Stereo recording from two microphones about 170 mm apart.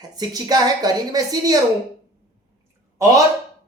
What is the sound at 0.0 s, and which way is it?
Speech, 25° right (ahead or behind).